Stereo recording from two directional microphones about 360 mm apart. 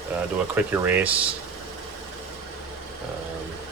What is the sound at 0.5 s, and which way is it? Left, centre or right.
Speech, centre.